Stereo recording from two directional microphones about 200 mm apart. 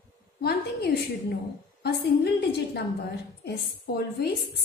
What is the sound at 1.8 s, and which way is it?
Speech, 55° left (ahead or behind).